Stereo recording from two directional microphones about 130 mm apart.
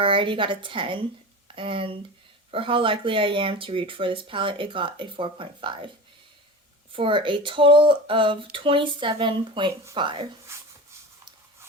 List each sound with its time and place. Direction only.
0.0 s speech: 40° right (ahead or behind)
6.9 s speech: 40° right (ahead or behind)
10.5 s speech: 20° right (ahead or behind)